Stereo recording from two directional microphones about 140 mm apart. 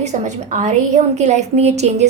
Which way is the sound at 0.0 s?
55° right (ahead or behind).